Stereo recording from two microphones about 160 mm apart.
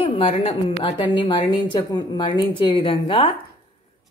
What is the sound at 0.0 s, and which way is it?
A woman's voice, 35° left (ahead or behind).